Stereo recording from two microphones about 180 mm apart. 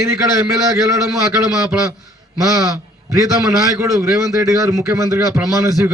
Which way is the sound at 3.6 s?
15° right (ahead or behind).